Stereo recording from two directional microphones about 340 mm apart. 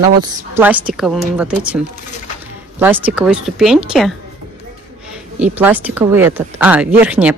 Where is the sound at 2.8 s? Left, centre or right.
Centre.